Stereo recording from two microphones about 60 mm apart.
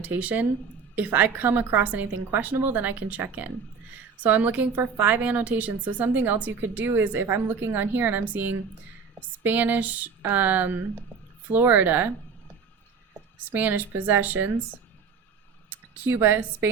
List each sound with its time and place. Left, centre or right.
0.0 s a woman's voice: right
13.4 s a woman's voice: right
15.7 s a sound: right
16.2 s speech: right